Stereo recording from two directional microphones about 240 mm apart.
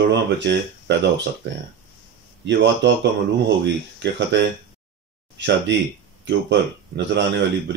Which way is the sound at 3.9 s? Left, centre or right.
Right.